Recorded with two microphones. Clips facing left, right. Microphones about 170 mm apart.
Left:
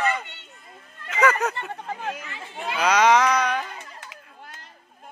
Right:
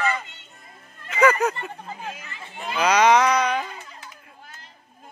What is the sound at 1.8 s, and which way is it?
Chatter, 70° left (ahead or behind).